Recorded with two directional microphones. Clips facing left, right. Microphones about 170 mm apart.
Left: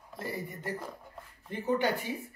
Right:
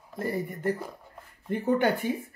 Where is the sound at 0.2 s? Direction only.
50° right (ahead or behind).